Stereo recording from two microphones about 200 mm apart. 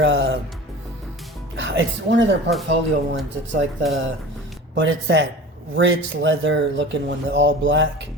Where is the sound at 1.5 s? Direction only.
65° right (ahead or behind).